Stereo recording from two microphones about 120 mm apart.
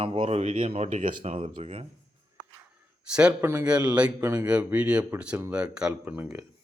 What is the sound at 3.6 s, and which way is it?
Speech, 10° right (ahead or behind).